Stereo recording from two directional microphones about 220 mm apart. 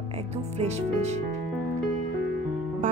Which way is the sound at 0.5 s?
30° right (ahead or behind).